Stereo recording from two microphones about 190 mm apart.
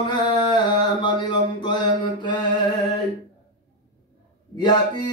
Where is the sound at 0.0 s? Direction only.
25° left (ahead or behind).